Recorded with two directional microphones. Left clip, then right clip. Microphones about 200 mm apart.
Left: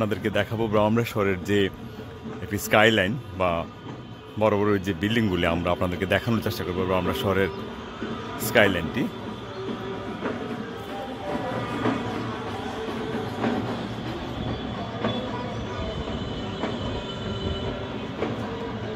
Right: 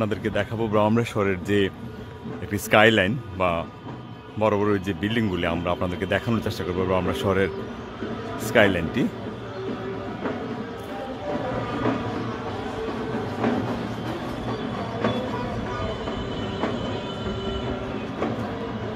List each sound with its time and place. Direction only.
0.0 s a man's voice: 5° left (ahead or behind)
11.2 s a sound: 40° left (ahead or behind)
13.1 s train: 25° left (ahead or behind)